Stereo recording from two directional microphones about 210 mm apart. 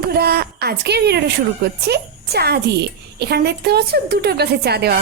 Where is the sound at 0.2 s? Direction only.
50° right (ahead or behind).